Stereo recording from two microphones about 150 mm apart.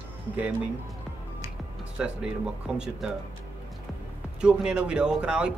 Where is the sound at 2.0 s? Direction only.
5° right (ahead or behind).